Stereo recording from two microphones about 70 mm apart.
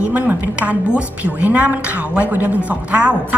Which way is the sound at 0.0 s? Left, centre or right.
Right.